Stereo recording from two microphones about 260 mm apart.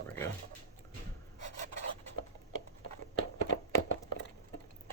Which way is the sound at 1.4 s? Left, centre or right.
Right.